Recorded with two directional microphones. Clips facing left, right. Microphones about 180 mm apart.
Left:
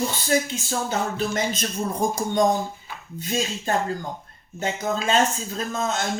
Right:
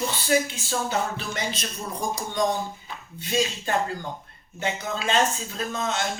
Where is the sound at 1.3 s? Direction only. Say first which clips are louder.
Left 6 dB; 45° left (ahead or behind).